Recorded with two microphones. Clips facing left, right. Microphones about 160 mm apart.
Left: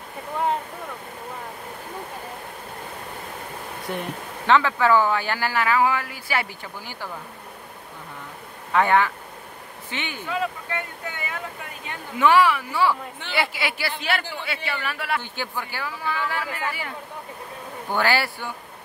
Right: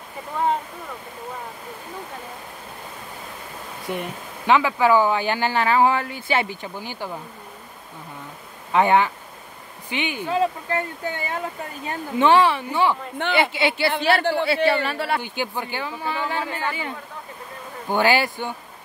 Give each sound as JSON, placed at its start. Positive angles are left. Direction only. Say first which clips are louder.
{"t": 3.8, "sound": "speech", "louder": "right 2 dB", "side_deg": 0}
{"t": 4.5, "sound": "speech", "louder": "right 1 dB", "side_deg": -15}
{"t": 8.7, "sound": "speech", "louder": "right 2 dB", "side_deg": -20}
{"t": 10.2, "sound": "speech", "louder": "right 5 dB", "side_deg": -35}
{"t": 15.2, "sound": "speech", "louder": "right 4 dB", "side_deg": -15}